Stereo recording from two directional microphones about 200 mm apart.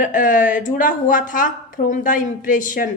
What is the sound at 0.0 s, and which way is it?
A woman's voice, 40° left (ahead or behind).